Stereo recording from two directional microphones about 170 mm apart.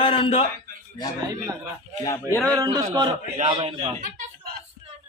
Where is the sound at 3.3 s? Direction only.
40° right (ahead or behind).